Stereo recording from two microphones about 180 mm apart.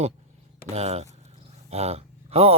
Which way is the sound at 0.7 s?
35° right (ahead or behind).